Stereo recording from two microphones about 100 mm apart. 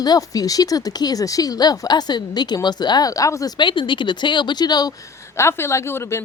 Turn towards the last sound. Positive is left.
turn(degrees=25)  # may be behind; listen again after turning